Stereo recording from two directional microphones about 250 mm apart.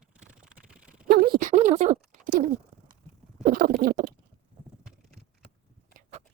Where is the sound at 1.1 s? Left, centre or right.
Right.